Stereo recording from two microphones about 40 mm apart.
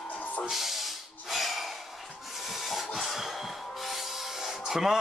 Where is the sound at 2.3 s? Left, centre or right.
Centre.